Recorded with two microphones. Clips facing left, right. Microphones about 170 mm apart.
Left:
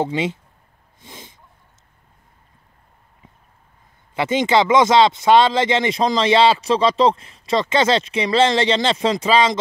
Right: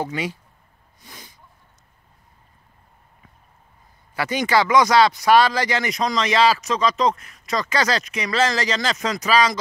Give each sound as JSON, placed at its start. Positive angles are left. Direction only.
{"t": 0.0, "sound": "speech", "side_deg": 25}
{"t": 1.0, "sound": "a sound", "side_deg": 25}
{"t": 4.1, "sound": "speech", "side_deg": 25}